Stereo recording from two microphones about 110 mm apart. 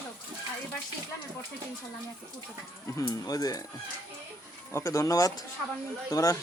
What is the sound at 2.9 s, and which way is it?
Speech, 35° left (ahead or behind).